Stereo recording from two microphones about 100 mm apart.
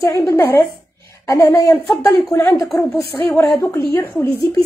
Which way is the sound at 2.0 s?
40° left (ahead or behind).